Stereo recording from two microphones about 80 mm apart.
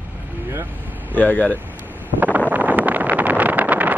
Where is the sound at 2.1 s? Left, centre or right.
Right.